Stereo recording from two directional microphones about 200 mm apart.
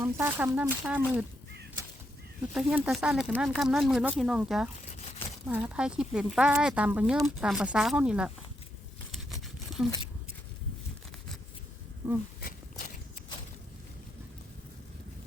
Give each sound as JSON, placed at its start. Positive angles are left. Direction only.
{"t": 0.0, "sound": "speech", "side_deg": -10}
{"t": 2.5, "sound": "speech", "side_deg": 0}
{"t": 9.3, "sound": "toothbrush", "side_deg": 0}
{"t": 12.4, "sound": "a sound", "side_deg": 45}